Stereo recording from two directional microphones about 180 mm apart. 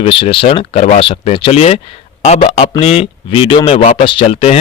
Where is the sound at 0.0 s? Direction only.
30° left (ahead or behind).